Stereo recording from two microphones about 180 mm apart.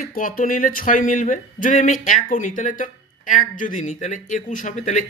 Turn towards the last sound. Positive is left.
turn(degrees=40)  # may be behind; listen again after turning